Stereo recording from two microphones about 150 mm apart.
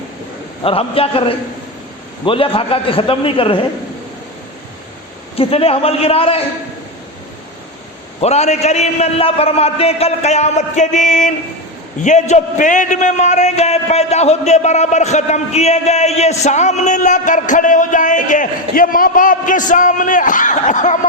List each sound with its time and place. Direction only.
0.6 s a man's voice: 40° left (ahead or behind)
5.4 s a man's voice: 40° left (ahead or behind)
8.2 s a man's voice: 45° left (ahead or behind)